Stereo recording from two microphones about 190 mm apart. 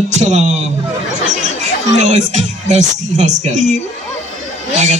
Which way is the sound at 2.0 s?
40° right (ahead or behind).